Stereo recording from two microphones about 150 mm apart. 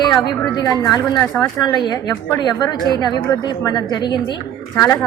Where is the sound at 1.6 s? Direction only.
25° left (ahead or behind).